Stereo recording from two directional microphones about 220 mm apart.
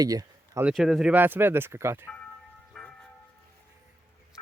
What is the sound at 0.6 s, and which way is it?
Speech, centre (ahead or behind).